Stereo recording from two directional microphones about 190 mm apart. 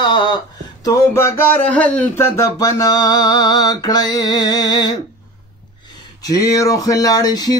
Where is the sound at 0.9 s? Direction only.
15° left (ahead or behind).